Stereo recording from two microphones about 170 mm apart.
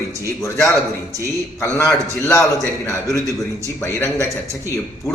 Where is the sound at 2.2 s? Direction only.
15° left (ahead or behind).